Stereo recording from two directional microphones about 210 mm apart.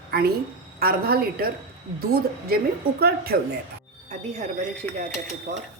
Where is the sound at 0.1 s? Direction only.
45° right (ahead or behind).